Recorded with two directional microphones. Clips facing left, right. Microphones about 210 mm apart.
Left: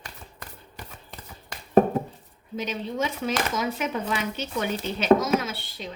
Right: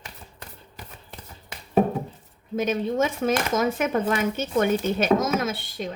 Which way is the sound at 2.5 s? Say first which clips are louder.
Right 6 dB; 50° right (ahead or behind).